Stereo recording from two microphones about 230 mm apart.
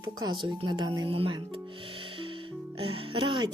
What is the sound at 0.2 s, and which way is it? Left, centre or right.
Speech, centre.